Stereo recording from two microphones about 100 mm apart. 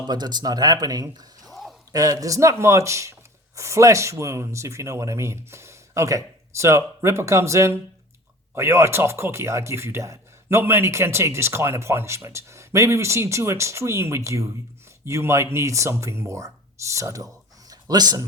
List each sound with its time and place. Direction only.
0.1 s speech: 45° right (ahead or behind)
1.5 s a sound: centre (ahead or behind)
1.9 s speech: 35° right (ahead or behind)